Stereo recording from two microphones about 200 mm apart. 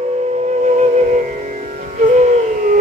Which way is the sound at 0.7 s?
35° right (ahead or behind).